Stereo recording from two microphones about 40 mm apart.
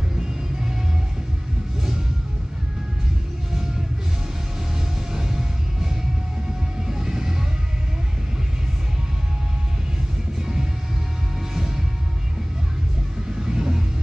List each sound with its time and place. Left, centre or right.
5.1 s music: centre
6.9 s music: centre
10.4 s music: centre
13.4 s vehicle: centre